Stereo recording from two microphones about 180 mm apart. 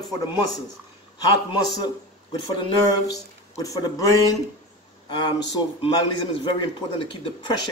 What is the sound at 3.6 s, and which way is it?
Speech, 20° left (ahead or behind).